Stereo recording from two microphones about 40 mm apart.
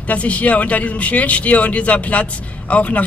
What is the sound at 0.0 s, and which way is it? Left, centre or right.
A man's voice, left.